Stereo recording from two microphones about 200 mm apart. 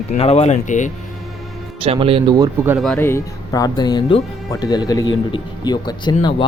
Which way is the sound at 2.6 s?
Centre (ahead or behind).